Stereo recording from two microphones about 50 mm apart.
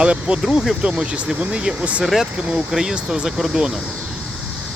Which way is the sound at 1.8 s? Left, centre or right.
Right.